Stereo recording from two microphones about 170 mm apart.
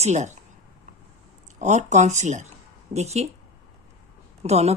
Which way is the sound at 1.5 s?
45° right (ahead or behind).